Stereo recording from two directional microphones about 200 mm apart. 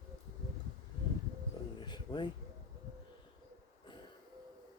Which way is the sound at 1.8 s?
20° left (ahead or behind).